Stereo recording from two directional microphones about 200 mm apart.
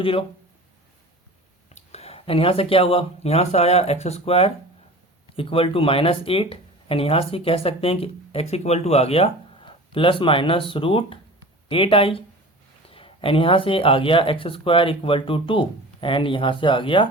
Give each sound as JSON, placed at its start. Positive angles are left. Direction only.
{"t": 0.0, "sound": "speech", "side_deg": 25}
{"t": 1.7, "sound": "speech", "side_deg": 30}